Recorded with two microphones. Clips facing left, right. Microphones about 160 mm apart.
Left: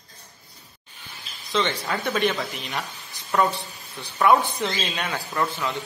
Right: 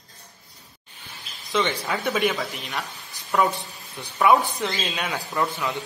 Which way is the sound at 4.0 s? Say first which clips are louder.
Right 1 dB; 15° right (ahead or behind).